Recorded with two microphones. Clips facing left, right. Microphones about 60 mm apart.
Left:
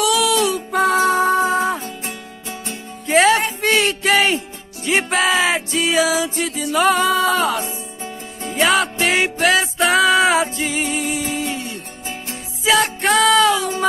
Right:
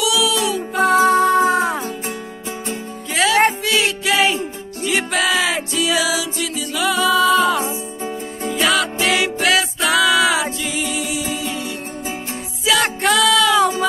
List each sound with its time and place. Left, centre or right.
0.0 s music: left
1.3 s music: right
3.1 s music: left
3.6 s music: left
4.8 s music: left
8.5 s music: left
13.0 s music: left